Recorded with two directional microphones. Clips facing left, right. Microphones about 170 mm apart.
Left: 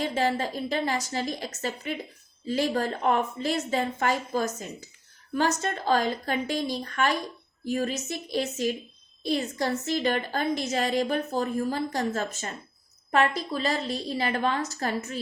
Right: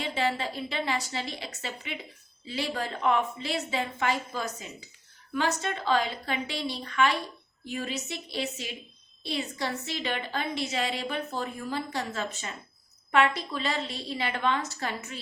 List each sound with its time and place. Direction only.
0.0 s a woman's voice: 45° left (ahead or behind)